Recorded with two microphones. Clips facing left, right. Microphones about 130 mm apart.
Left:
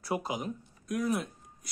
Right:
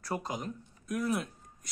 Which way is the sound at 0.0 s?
10° left (ahead or behind).